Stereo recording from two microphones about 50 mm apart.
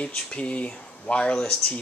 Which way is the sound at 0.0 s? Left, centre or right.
Left.